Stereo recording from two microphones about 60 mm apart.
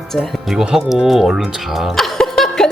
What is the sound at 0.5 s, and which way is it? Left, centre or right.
A woman's voice, centre.